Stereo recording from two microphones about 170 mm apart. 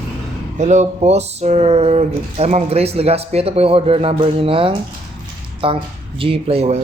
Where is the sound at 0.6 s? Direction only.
45° right (ahead or behind).